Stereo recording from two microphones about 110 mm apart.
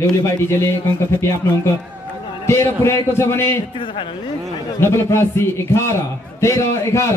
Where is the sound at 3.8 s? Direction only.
50° left (ahead or behind).